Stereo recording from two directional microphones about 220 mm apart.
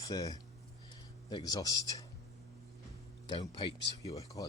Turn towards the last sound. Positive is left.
turn(degrees=15)  # may be behind; listen again after turning